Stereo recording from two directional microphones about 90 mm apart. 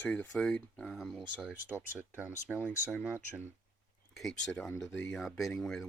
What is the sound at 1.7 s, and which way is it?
Speech, 20° right (ahead or behind).